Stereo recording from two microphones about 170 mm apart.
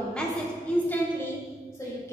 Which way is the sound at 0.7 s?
5° left (ahead or behind).